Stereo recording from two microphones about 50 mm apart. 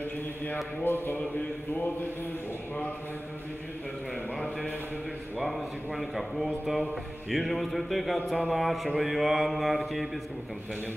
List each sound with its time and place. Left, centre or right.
0.8 s a man's voice: left
5.9 s mantra: centre